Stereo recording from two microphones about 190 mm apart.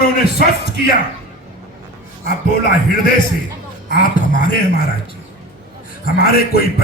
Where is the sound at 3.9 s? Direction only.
50° left (ahead or behind).